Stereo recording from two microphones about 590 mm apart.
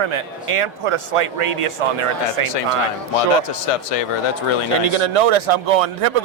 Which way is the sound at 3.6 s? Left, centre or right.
Left.